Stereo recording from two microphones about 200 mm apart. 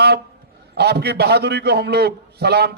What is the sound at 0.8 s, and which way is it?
A man's voice, 55° right (ahead or behind).